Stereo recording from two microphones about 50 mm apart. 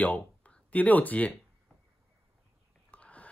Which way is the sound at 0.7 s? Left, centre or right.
Left.